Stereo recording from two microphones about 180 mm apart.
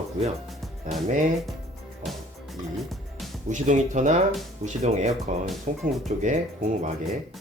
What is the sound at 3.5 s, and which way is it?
Speech, 45° right (ahead or behind).